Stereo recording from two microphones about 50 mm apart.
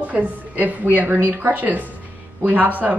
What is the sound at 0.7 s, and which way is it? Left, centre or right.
A woman's voice, right.